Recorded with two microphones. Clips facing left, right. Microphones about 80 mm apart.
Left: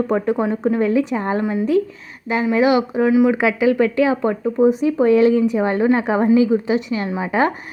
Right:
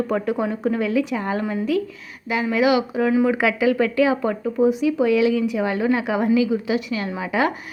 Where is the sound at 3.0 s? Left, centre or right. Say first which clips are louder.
Left 4 dB; centre.